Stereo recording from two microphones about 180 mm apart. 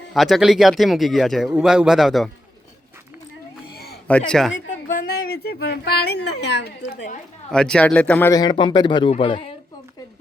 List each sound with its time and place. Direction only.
0.1 s speech: centre (ahead or behind)
4.1 s speech: 5° left (ahead or behind)
4.9 s speech: 55° left (ahead or behind); by 6.7 s 70° left (ahead or behind)
7.5 s a man's voice: 5° left (ahead or behind)
8.3 s speech: 25° left (ahead or behind)